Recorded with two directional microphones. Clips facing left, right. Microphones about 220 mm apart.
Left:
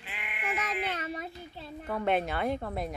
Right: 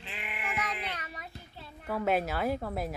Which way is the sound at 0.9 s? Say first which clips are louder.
Left 7 dB; 25° left (ahead or behind).